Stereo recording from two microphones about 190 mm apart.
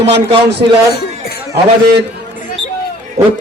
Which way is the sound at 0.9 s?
60° left (ahead or behind).